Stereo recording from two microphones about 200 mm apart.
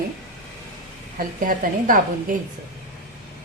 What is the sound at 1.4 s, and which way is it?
Speech, 40° right (ahead or behind).